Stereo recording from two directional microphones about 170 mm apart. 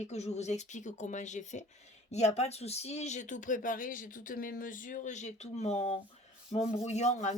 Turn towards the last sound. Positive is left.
turn(degrees=40)  # may be behind; listen again after turning